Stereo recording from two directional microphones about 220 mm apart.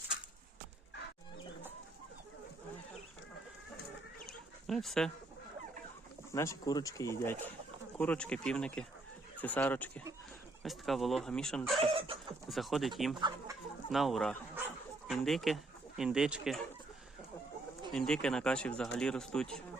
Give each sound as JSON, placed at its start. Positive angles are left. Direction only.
{"t": 4.3, "sound": "chicken", "side_deg": 0}
{"t": 6.3, "sound": "speech", "side_deg": 15}
{"t": 11.8, "sound": "chicken", "side_deg": -25}
{"t": 12.5, "sound": "speech", "side_deg": 0}
{"t": 13.1, "sound": "speech", "side_deg": -20}
{"t": 13.9, "sound": "speech", "side_deg": 0}
{"t": 17.9, "sound": "speech", "side_deg": 5}